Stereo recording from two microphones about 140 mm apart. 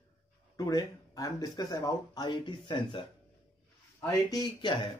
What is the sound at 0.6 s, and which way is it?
Speech, 25° left (ahead or behind).